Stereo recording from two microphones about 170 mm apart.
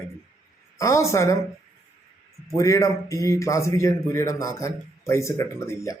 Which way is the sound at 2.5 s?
20° left (ahead or behind).